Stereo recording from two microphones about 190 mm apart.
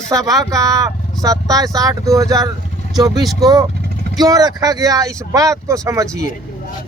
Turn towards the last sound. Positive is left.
turn(degrees=-15)  # may be behind; listen again after turning